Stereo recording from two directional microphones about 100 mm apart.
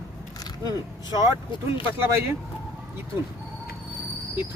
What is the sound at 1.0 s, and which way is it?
Speech, 35° right (ahead or behind).